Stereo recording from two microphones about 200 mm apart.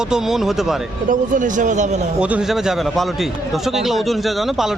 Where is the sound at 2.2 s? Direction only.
5° right (ahead or behind).